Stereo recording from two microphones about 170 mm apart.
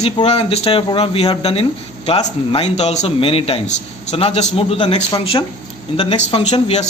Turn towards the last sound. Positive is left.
turn(degrees=35)  # may be behind; listen again after turning